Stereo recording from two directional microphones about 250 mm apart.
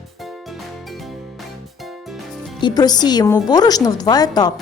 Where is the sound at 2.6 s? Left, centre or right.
Centre.